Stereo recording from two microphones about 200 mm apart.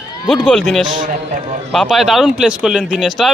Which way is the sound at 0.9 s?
40° right (ahead or behind).